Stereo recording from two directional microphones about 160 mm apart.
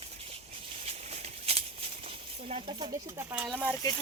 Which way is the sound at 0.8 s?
40° right (ahead or behind).